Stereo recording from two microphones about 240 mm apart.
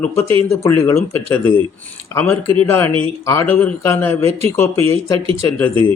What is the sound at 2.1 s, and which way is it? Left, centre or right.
Speech, centre.